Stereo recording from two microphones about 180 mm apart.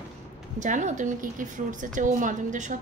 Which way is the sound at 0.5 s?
45° right (ahead or behind).